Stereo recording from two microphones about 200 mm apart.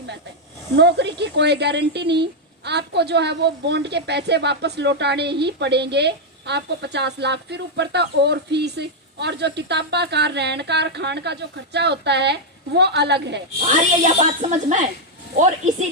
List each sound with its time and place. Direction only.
0.8 s a woman's voice: 60° right (ahead or behind)
13.7 s speech: 35° right (ahead or behind)
15.4 s speech: 40° right (ahead or behind)